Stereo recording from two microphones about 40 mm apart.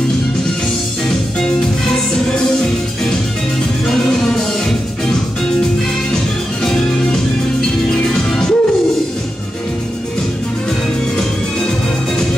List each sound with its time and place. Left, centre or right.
1.0 s music: centre
6.6 s music: centre